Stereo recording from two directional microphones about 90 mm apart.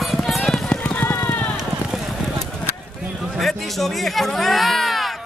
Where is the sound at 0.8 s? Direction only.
20° left (ahead or behind).